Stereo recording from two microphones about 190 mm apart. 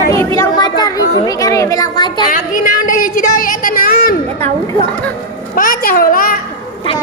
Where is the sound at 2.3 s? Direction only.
45° left (ahead or behind).